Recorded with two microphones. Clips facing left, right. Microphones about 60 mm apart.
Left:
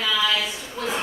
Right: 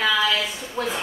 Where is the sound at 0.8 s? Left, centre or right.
Right.